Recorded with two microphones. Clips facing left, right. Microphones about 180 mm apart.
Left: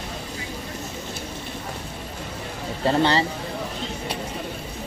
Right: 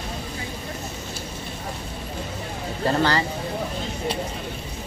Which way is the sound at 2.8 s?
25° left (ahead or behind).